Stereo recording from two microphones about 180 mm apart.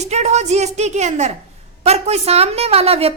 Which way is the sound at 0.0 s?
40° right (ahead or behind).